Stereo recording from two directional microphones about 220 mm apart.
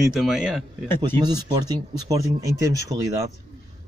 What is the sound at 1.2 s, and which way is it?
Speech, 15° right (ahead or behind).